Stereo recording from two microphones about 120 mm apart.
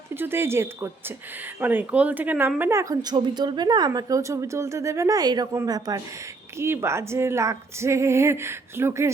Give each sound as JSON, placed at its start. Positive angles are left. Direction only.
{"t": 0.1, "sound": "a woman's voice", "side_deg": -20}